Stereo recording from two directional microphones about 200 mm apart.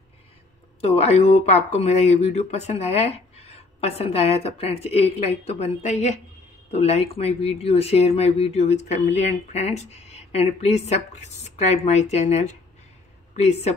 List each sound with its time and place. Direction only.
0.7 s speech: 30° left (ahead or behind)